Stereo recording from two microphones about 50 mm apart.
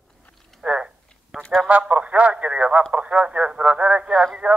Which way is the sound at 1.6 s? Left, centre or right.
Right.